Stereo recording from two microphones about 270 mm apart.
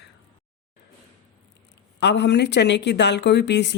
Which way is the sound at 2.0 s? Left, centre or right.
Left.